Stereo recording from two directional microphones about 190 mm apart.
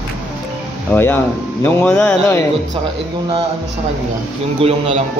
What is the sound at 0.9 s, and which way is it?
Speech, 10° left (ahead or behind).